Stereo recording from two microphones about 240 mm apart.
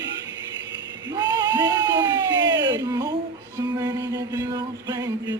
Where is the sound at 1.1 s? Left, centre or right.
Centre.